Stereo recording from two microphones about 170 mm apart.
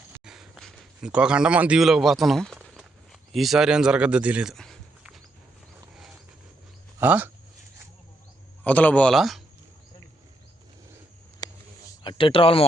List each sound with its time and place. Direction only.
0.3 s speech: centre (ahead or behind)
2.6 s a sound: centre (ahead or behind)
7.0 s speech: 10° right (ahead or behind)
8.6 s speech: 10° left (ahead or behind)
11.4 s a sound: 25° left (ahead or behind)
11.9 s speech: 30° left (ahead or behind)